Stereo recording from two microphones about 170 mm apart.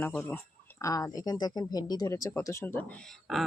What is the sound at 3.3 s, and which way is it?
Speech, centre (ahead or behind).